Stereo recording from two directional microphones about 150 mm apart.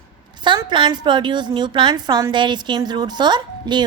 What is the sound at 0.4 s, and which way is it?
A woman's voice, 30° right (ahead or behind).